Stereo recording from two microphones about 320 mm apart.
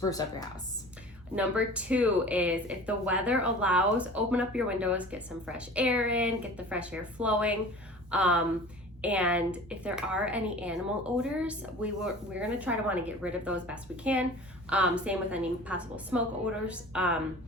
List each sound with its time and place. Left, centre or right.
0.0 s a woman's voice: centre
1.4 s speech: centre